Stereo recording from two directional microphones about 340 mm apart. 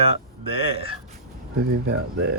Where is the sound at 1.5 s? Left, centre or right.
Right.